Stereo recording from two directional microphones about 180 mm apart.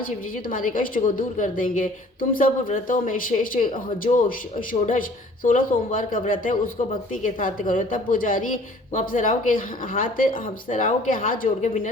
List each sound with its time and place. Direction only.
0.5 s speech: 50° left (ahead or behind)